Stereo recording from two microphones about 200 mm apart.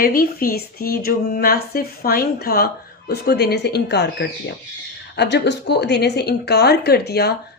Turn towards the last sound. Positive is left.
turn(degrees=55)  # may be behind; listen again after turning